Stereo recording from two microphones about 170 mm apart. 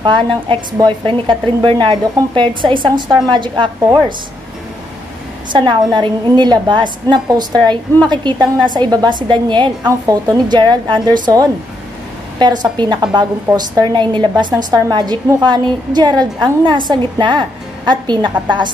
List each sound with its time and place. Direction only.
0.0 s a woman's voice: 30° right (ahead or behind)
3.8 s speech: 15° right (ahead or behind)
5.5 s a woman's voice: 25° right (ahead or behind)